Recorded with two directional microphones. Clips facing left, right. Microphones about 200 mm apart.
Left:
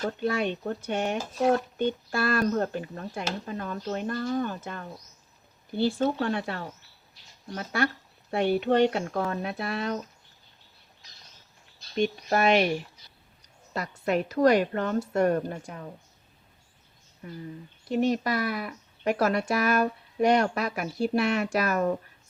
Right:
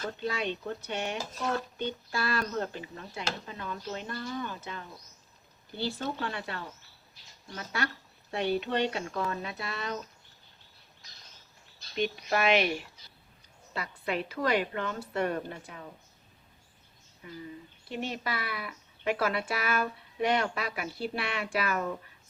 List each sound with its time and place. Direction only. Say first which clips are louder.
0.2 s speech: left 5 dB; 50° left (ahead or behind)
11.9 s speech: left 4 dB; 45° left (ahead or behind)
13.7 s speech: left 6 dB; 45° left (ahead or behind)
17.2 s speech: left 3 dB; 45° left (ahead or behind)